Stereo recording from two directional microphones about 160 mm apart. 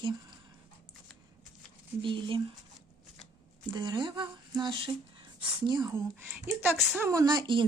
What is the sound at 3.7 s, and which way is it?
Speech, 30° right (ahead or behind).